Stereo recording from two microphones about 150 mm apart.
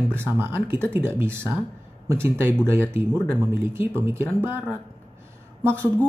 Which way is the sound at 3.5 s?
15° right (ahead or behind).